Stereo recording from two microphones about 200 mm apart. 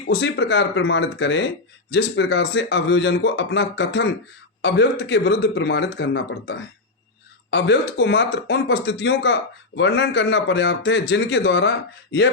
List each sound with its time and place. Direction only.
0.0 s speech: 60° left (ahead or behind)